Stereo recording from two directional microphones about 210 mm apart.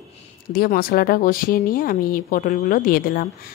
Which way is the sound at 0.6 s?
45° left (ahead or behind).